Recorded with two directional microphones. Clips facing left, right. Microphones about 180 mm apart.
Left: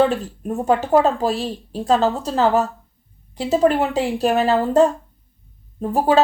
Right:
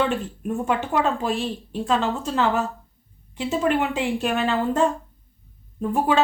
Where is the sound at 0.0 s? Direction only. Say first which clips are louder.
Left 5 dB; 35° left (ahead or behind).